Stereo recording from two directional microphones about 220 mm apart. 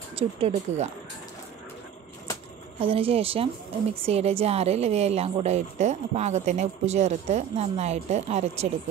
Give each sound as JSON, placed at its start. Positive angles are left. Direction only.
{"t": 0.1, "sound": "speech", "side_deg": -25}
{"t": 2.8, "sound": "speech", "side_deg": -25}